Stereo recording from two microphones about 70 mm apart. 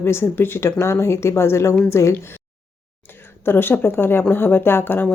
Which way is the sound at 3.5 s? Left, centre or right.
Left.